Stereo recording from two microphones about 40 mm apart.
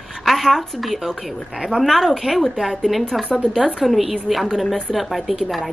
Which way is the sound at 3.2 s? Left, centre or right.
Left.